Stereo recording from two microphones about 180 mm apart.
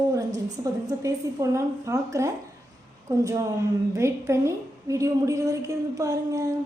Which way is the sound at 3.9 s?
15° right (ahead or behind).